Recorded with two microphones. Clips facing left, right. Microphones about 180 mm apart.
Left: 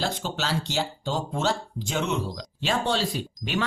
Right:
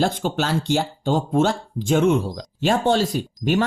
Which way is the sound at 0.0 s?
50° right (ahead or behind).